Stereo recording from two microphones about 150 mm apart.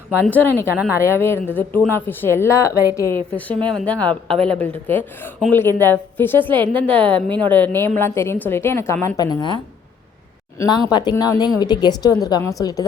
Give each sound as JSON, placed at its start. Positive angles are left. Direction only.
{"t": 0.3, "sound": "a woman's voice", "side_deg": 10}
{"t": 0.7, "sound": "speech", "side_deg": -10}
{"t": 1.0, "sound": "a woman's voice", "side_deg": 15}
{"t": 3.3, "sound": "a woman's voice", "side_deg": 10}
{"t": 6.5, "sound": "a woman's voice", "side_deg": -35}
{"t": 6.9, "sound": "a woman's voice", "side_deg": 10}
{"t": 10.9, "sound": "a woman's voice", "side_deg": 25}